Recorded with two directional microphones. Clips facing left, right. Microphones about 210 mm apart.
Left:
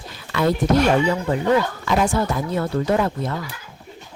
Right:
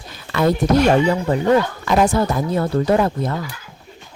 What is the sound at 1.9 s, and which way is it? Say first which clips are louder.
Speech: right 4 dB; 40° right (ahead or behind).